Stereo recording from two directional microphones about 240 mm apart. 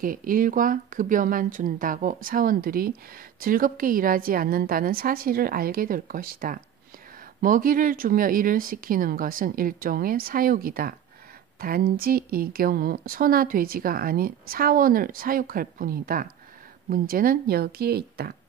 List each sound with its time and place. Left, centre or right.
0.0 s speech: right